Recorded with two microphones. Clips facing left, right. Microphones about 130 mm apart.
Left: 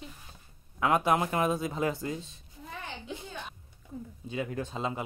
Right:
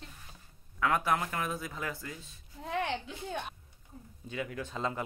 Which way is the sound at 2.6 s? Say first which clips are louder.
Right 9 dB; 80° right.